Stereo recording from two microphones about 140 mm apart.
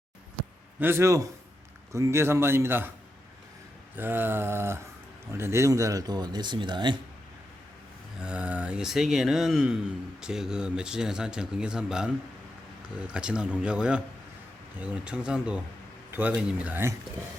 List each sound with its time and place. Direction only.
0.8 s a man's voice: 15° right (ahead or behind)
3.9 s a man's voice: 15° right (ahead or behind); by 7.0 s 35° right (ahead or behind)
8.2 s a man's voice: 10° right (ahead or behind)